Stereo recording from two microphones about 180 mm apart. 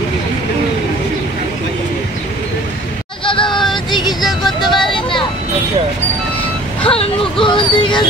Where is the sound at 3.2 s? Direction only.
30° left (ahead or behind).